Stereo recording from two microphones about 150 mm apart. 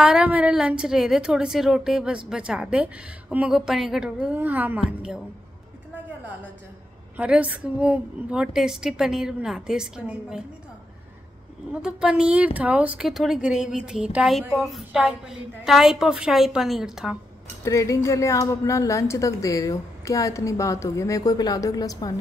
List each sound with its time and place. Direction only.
0.0 s a woman's voice: 5° right (ahead or behind)
7.2 s a woman's voice: 10° right (ahead or behind)
11.7 s a woman's voice: 5° right (ahead or behind)
17.6 s a woman's voice: 20° left (ahead or behind)